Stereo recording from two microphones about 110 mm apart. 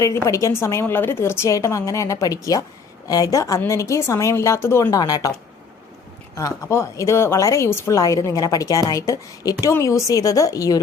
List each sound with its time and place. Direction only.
0.0 s a woman's voice: 30° left (ahead or behind)
6.3 s a woman's voice: 25° left (ahead or behind)